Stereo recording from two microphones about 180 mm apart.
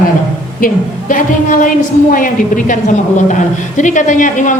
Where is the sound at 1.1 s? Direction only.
45° left (ahead or behind).